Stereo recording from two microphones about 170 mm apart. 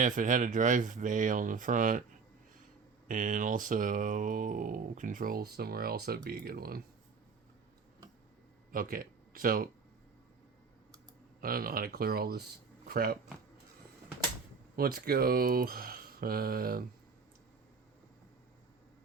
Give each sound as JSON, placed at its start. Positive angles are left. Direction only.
{"t": 0.0, "sound": "speech", "side_deg": -50}
{"t": 3.1, "sound": "speech", "side_deg": -50}
{"t": 8.7, "sound": "speech", "side_deg": -55}
{"t": 11.3, "sound": "speech", "side_deg": -60}
{"t": 14.8, "sound": "speech", "side_deg": -60}